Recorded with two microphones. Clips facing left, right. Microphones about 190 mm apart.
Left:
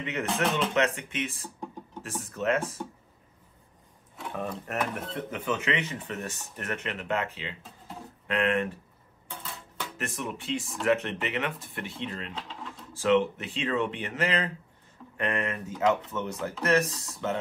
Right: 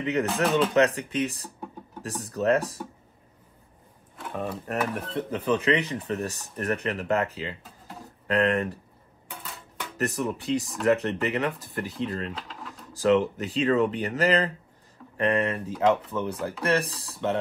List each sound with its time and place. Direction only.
0.0 s speech: 35° right (ahead or behind)
0.3 s speech: 5° right (ahead or behind)
0.7 s speech: 35° right (ahead or behind)
4.2 s speech: centre (ahead or behind)
5.3 s speech: 35° right (ahead or behind)
9.9 s speech: 40° right (ahead or behind)
12.4 s mechanisms: 5° right (ahead or behind)
12.9 s speech: 40° right (ahead or behind)